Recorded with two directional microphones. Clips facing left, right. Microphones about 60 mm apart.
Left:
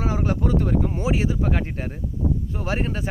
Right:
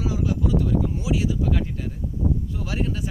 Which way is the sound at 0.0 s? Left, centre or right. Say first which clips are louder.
Left 1 dB; left.